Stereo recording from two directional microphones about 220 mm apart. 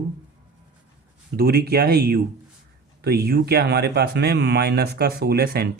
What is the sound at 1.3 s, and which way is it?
Speech, 45° right (ahead or behind).